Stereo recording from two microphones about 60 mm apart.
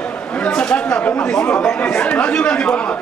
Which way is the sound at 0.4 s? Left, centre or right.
Centre.